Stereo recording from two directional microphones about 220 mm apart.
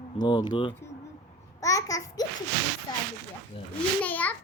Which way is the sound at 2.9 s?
20° left (ahead or behind).